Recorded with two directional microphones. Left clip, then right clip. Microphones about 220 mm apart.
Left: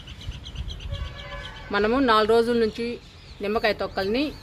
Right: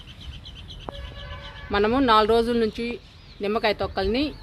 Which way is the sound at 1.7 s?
30° right (ahead or behind).